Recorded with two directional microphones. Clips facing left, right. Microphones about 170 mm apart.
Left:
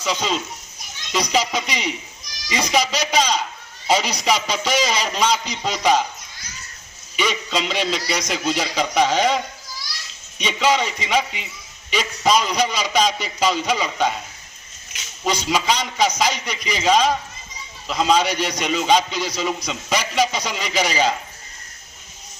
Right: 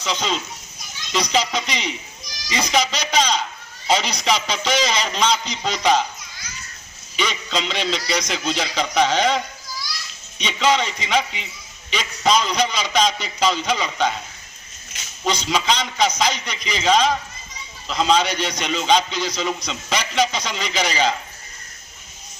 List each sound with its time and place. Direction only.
0.0 s a man's voice: 5° left (ahead or behind)
7.2 s a man's voice: 5° left (ahead or behind)
15.2 s a man's voice: 5° left (ahead or behind)